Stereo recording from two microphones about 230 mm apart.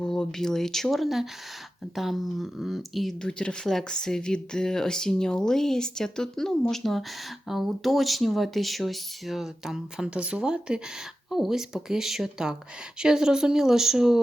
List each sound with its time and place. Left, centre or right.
0.0 s speech: centre